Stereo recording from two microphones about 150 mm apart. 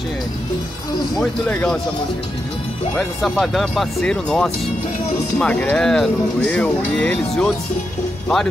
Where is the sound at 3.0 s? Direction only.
Centre (ahead or behind).